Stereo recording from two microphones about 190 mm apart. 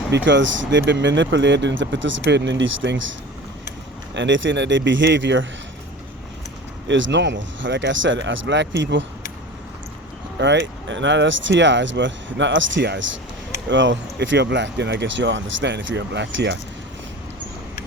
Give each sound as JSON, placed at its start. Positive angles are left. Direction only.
{"t": 0.1, "sound": "speech", "side_deg": -70}
{"t": 4.1, "sound": "speech", "side_deg": -75}
{"t": 6.8, "sound": "speech", "side_deg": -75}
{"t": 10.4, "sound": "speech", "side_deg": -70}